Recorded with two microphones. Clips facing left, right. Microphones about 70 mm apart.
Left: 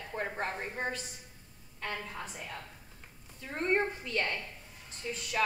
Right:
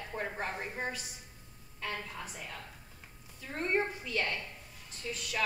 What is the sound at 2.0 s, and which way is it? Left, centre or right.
Speech, left.